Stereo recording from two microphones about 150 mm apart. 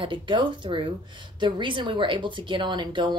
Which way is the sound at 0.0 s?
35° right (ahead or behind).